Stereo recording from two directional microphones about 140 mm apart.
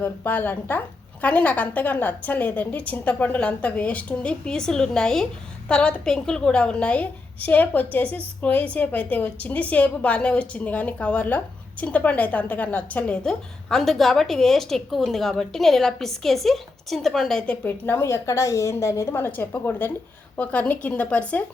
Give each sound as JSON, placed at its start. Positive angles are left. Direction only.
{"t": 0.0, "sound": "a woman's voice", "side_deg": 15}